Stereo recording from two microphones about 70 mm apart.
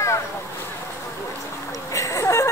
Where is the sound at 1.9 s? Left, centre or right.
Left.